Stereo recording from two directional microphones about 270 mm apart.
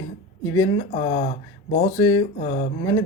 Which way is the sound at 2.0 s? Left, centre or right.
Centre.